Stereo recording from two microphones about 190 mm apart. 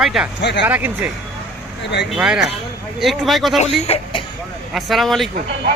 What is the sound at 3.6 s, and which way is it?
Speech, 30° left (ahead or behind).